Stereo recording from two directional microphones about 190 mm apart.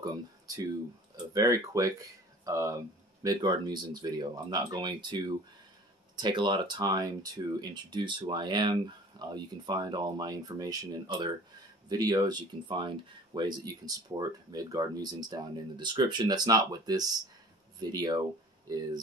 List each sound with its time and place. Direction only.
1.1 s speech: 15° right (ahead or behind)